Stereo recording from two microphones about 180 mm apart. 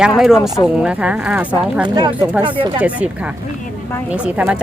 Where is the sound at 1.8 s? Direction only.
25° right (ahead or behind).